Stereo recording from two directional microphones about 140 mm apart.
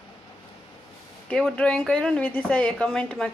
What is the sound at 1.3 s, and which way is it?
A woman's voice, 5° left (ahead or behind).